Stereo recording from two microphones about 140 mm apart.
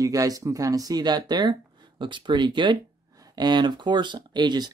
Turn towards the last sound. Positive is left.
turn(degrees=-30)  # may be behind; listen again after turning